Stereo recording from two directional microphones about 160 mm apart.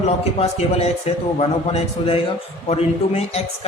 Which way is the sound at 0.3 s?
40° left (ahead or behind).